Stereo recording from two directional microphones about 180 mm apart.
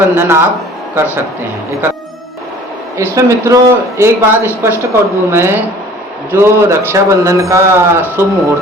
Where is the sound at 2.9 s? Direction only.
15° right (ahead or behind).